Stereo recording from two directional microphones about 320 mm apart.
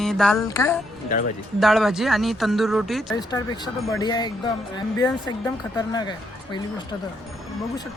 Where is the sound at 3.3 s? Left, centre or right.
Centre.